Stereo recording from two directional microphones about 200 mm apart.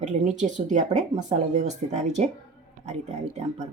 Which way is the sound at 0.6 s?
35° right (ahead or behind).